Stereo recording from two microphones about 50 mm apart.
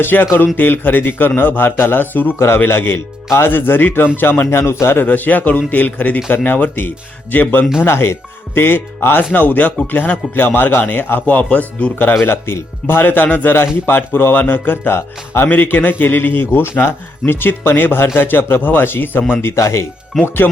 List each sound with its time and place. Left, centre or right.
0.0 s a man's voice: left
2.6 s a man's voice: left
3.5 s a man's voice: left
4.5 s speech: left
5.0 s a man's voice: left
7.8 s a man's voice: left
9.3 s a man's voice: left
12.2 s speech: left
13.0 s a man's voice: left
15.4 s a man's voice: left
19.5 s speech: left
20.2 s a man's voice: left